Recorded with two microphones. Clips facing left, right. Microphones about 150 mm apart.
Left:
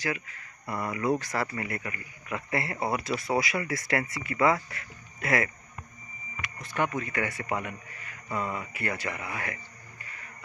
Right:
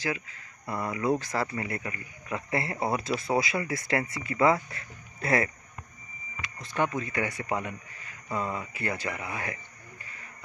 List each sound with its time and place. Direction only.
0.7 s speech: 20° right (ahead or behind)
6.8 s speech: 25° right (ahead or behind)